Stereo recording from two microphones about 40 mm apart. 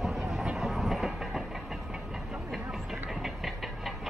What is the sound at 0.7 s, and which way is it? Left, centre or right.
Train, centre.